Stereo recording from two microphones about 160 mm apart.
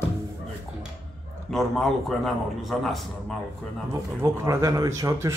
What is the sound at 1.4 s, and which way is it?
A man's voice, centre (ahead or behind).